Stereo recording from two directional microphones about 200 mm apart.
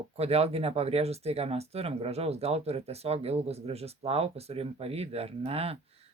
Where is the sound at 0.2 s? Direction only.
30° right (ahead or behind).